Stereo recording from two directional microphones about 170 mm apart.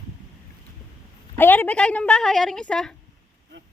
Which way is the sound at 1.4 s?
10° left (ahead or behind).